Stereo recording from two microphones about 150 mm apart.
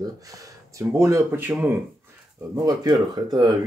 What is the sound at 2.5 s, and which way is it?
Speech, 25° right (ahead or behind).